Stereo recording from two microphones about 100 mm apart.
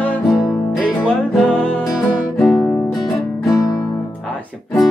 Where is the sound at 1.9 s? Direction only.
5° left (ahead or behind).